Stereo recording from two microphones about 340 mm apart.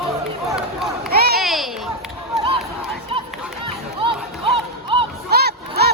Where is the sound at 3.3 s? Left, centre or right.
Centre.